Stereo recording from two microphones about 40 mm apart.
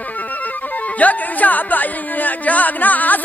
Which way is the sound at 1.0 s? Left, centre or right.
Left.